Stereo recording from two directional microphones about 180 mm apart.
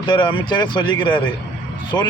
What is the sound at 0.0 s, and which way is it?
Speech, 25° left (ahead or behind).